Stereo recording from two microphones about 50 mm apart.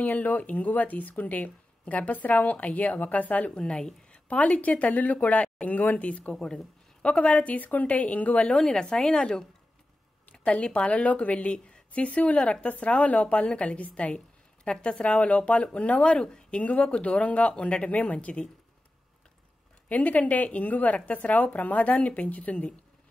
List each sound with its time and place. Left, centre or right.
0.0 s speech: left
3.5 s a woman's voice: centre
8.5 s a woman's voice: centre
19.9 s speech: left